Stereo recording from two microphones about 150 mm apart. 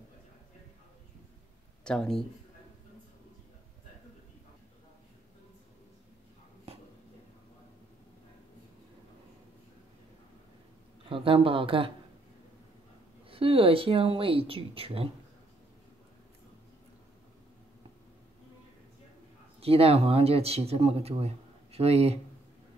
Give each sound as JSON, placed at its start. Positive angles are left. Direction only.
{"t": 1.9, "sound": "speech", "side_deg": 5}
{"t": 11.1, "sound": "speech", "side_deg": -35}
{"t": 13.3, "sound": "speech", "side_deg": -40}
{"t": 19.6, "sound": "speech", "side_deg": -40}